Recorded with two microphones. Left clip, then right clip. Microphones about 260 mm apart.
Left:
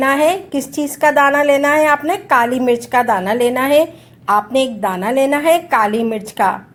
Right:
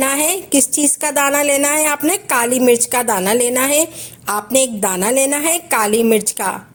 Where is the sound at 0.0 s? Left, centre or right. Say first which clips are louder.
Left 5 dB; right.